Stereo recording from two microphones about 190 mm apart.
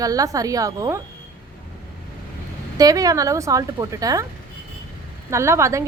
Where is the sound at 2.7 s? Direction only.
20° right (ahead or behind).